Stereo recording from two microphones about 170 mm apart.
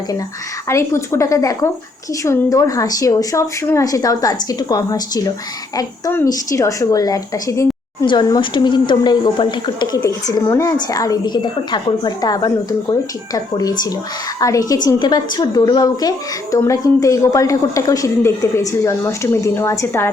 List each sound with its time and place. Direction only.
0.7 s a woman's voice: 15° left (ahead or behind)